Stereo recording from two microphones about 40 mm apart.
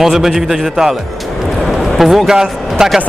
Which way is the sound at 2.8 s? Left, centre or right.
Centre.